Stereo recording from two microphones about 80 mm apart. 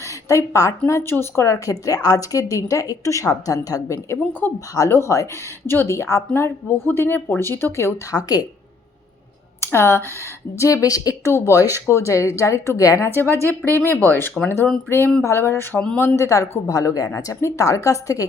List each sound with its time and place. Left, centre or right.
0.3 s a woman's voice: left
8.1 s a woman's voice: left
9.6 s speech: left
10.6 s a woman's voice: left
13.1 s a woman's voice: left